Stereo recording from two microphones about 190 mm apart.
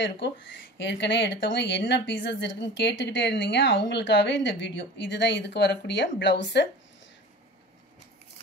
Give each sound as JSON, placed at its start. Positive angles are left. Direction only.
{"t": 0.0, "sound": "speech", "side_deg": 70}